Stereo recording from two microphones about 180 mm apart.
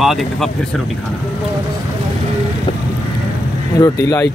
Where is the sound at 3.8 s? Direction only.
20° left (ahead or behind).